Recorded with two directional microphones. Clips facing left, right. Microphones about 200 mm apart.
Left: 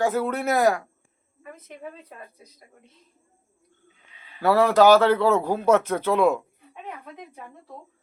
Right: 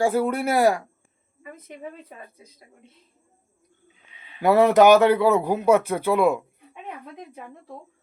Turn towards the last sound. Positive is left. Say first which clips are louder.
# even
turn(degrees=-10)  # may be behind; listen again after turning